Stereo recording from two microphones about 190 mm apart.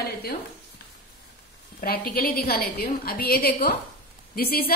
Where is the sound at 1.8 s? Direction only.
55° left (ahead or behind).